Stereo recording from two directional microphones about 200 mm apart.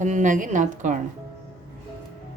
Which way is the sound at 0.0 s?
40° right (ahead or behind).